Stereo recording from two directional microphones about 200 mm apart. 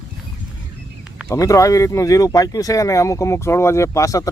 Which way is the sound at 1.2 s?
15° left (ahead or behind).